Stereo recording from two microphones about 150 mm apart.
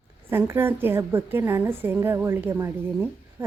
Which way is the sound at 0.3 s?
15° right (ahead or behind).